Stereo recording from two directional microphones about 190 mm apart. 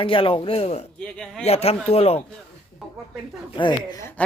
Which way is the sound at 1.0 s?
5° left (ahead or behind).